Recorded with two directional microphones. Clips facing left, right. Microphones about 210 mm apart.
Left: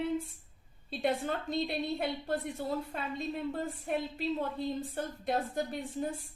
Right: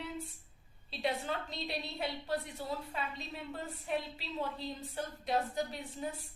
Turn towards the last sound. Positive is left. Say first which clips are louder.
# left 4 dB
turn(degrees=50)  # may be behind; listen again after turning